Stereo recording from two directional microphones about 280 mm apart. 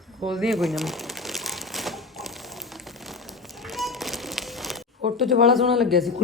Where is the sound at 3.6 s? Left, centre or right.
Centre.